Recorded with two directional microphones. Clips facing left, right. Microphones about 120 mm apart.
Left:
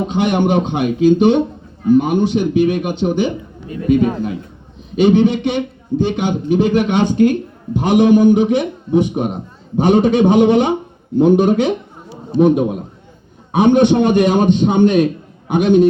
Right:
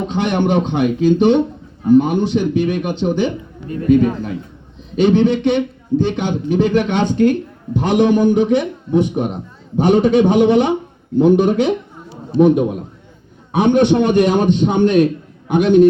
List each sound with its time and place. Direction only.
0.0 s a man's voice: 15° left (ahead or behind)